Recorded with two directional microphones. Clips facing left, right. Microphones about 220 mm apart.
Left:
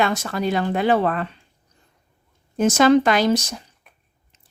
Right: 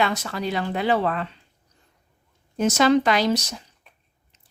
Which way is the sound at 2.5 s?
50° left (ahead or behind).